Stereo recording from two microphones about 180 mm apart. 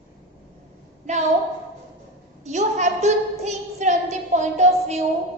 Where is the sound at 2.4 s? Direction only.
40° right (ahead or behind).